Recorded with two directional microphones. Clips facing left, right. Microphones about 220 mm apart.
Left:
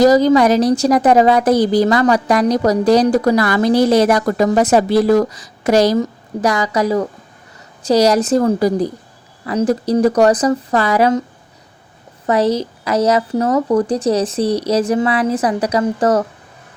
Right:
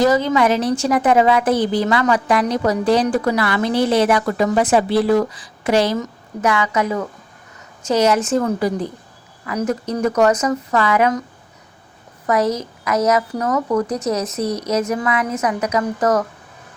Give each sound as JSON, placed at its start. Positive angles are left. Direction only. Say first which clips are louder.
{"t": 0.0, "sound": "a woman's voice", "louder": "left 5 dB", "side_deg": 40}
{"t": 12.2, "sound": "a woman's voice", "louder": "left 3 dB", "side_deg": 30}